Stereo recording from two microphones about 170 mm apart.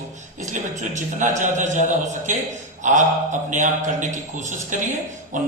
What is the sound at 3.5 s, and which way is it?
A man's voice, 45° right (ahead or behind).